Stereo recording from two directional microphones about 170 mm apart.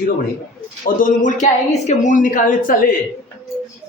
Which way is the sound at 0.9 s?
50° left (ahead or behind).